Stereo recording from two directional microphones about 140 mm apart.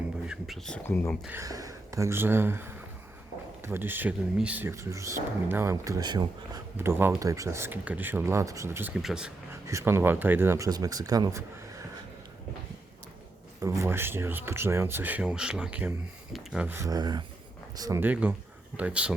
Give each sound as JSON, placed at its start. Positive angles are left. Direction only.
{"t": 0.3, "sound": "speech", "side_deg": 0}
{"t": 1.3, "sound": "speech", "side_deg": -25}
{"t": 6.7, "sound": "speech", "side_deg": -15}
{"t": 8.9, "sound": "speech", "side_deg": -5}
{"t": 9.6, "sound": "speech", "side_deg": -20}
{"t": 13.6, "sound": "speech", "side_deg": -20}
{"t": 16.7, "sound": "speech", "side_deg": -25}
{"t": 18.0, "sound": "speech", "side_deg": -10}